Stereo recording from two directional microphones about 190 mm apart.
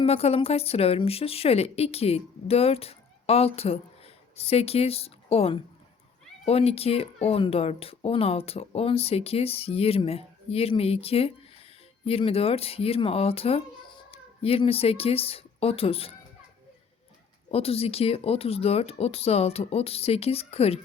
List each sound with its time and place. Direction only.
0.0 s speech: 30° left (ahead or behind)
17.5 s speech: 30° left (ahead or behind)